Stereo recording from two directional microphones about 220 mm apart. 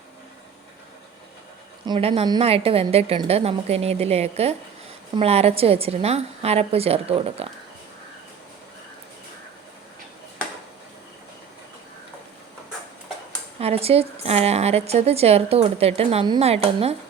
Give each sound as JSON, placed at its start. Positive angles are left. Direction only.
{"t": 1.9, "sound": "a woman's voice", "side_deg": -25}
{"t": 13.6, "sound": "a woman's voice", "side_deg": -25}